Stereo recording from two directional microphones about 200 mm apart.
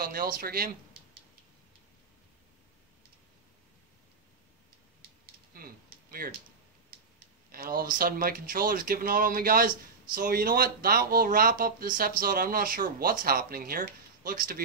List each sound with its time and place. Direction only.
0.0 s speech: 45° right (ahead or behind)
5.2 s a sound: 45° right (ahead or behind)
7.5 s speech: 45° right (ahead or behind)